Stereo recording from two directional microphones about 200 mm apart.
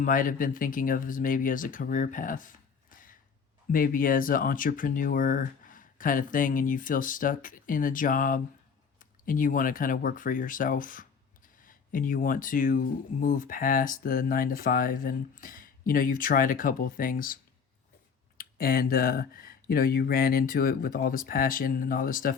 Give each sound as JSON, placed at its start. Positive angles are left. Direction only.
{"t": 0.0, "sound": "speech", "side_deg": 45}
{"t": 18.3, "sound": "speech", "side_deg": 45}